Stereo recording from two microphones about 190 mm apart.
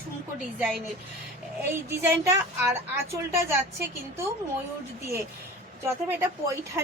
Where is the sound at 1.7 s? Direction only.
10° right (ahead or behind).